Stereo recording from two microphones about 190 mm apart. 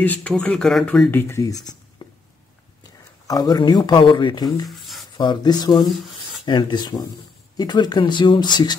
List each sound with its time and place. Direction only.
0.0 s speech: 5° left (ahead or behind)
1.2 s speech: 15° left (ahead or behind)
2.0 s a sound: 25° left (ahead or behind)
3.3 s speech: 20° left (ahead or behind)
4.6 s a sound: centre (ahead or behind)
5.1 s speech: 20° left (ahead or behind)
5.9 s speech: centre (ahead or behind)
6.4 s speech: 25° left (ahead or behind)